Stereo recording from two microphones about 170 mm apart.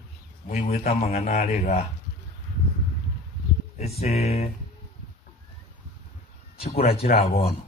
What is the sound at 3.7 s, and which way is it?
Speech, 40° left (ahead or behind).